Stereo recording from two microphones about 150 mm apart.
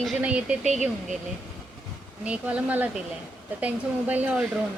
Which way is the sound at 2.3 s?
10° right (ahead or behind).